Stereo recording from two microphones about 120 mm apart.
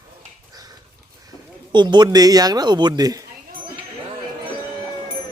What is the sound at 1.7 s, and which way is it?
Speech, 40° right (ahead or behind).